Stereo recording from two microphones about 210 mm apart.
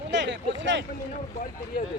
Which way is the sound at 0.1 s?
55° right (ahead or behind).